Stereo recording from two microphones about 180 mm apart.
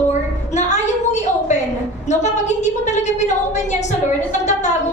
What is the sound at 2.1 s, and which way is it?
A woman's voice, 40° left (ahead or behind).